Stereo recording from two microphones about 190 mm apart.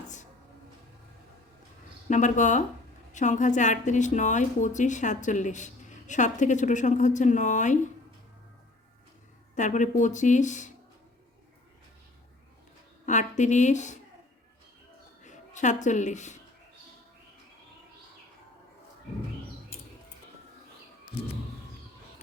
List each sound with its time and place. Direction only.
2.0 s a woman's voice: 40° left (ahead or behind)
9.6 s a woman's voice: 40° left (ahead or behind)
13.1 s a woman's voice: 40° left (ahead or behind)
15.2 s speech: 40° left (ahead or behind)